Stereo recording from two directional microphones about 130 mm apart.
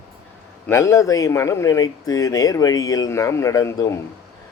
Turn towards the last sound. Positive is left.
turn(degrees=25)  # may be behind; listen again after turning